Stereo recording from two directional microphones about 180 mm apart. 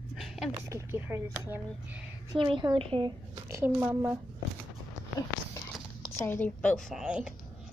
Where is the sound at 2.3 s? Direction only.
25° right (ahead or behind).